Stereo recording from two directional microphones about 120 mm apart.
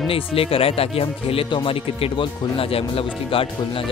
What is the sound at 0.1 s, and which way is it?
Speech, 50° left (ahead or behind).